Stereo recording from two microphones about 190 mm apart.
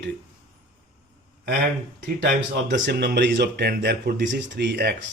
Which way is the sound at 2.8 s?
55° right (ahead or behind).